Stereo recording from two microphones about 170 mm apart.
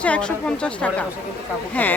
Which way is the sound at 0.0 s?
5° left (ahead or behind).